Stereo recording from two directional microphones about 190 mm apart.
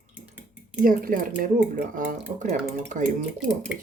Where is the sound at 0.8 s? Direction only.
45° right (ahead or behind).